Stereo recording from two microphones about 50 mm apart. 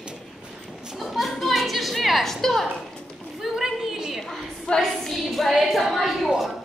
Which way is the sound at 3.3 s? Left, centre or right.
Centre.